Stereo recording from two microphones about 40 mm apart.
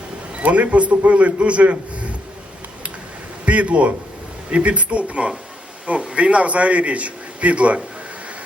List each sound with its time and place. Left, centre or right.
0.3 s a man's voice: right
3.4 s a man's voice: right